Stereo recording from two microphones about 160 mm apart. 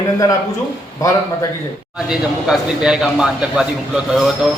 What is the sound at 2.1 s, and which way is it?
A man's voice, 5° right (ahead or behind).